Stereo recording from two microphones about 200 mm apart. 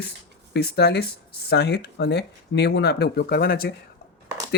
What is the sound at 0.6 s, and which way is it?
Speech, 55° left (ahead or behind).